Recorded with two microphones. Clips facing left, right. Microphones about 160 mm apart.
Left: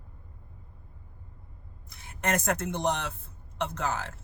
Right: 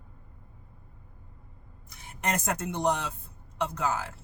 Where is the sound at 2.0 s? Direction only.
10° right (ahead or behind).